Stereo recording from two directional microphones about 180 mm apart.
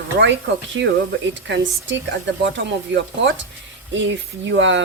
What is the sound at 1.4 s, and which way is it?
Speech, 90° right.